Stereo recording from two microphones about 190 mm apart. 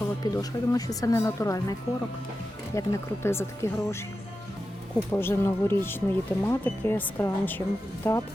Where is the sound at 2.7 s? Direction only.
15° left (ahead or behind).